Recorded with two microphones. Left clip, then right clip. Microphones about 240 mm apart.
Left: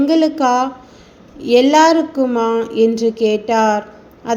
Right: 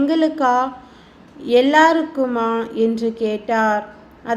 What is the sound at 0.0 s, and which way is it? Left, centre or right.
A woman's voice, left.